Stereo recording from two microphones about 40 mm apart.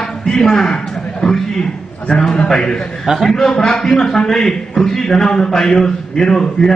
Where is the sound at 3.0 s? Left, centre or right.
Centre.